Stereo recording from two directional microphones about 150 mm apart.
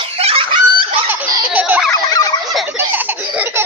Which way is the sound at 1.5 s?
10° right (ahead or behind).